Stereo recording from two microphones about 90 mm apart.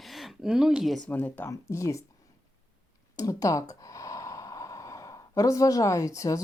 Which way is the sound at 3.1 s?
35° left (ahead or behind).